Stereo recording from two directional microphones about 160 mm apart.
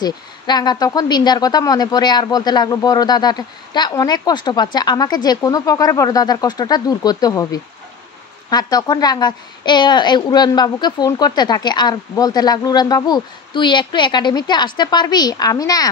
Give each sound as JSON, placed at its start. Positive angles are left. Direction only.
{"t": 0.0, "sound": "a woman's voice", "side_deg": 25}